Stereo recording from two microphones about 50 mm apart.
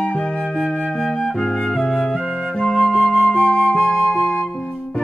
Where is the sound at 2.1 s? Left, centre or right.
Centre.